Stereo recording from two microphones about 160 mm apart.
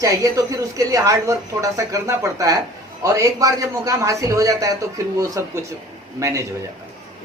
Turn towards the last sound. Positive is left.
turn(degrees=-20)  # may be behind; listen again after turning